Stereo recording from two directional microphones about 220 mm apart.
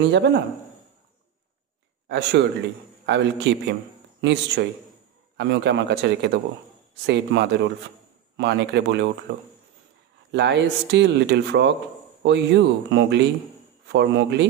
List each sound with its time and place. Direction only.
0.0 s speech: 50° right (ahead or behind)
2.0 s speech: 50° right (ahead or behind)
10.3 s speech: 50° right (ahead or behind)